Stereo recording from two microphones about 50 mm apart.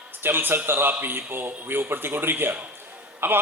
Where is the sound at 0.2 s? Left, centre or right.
Right.